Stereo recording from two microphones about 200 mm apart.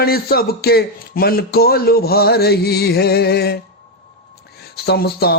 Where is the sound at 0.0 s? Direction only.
50° left (ahead or behind).